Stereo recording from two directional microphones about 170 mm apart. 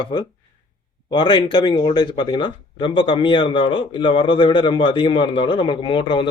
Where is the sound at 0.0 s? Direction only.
25° left (ahead or behind).